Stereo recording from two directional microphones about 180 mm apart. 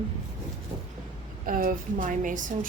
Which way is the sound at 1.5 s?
50° right (ahead or behind).